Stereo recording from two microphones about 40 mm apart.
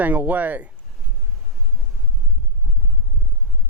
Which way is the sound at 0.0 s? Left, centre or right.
Right.